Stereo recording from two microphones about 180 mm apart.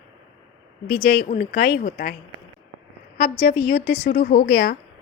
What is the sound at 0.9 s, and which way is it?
A woman's voice, 60° left (ahead or behind).